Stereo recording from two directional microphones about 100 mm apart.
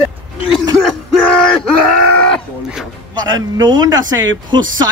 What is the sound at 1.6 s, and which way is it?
Groan, 5° left (ahead or behind).